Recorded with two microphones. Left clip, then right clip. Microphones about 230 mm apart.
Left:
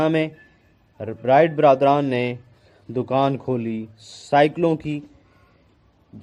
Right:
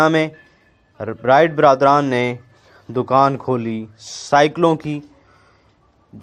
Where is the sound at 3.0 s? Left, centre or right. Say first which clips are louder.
Right 6 dB; right.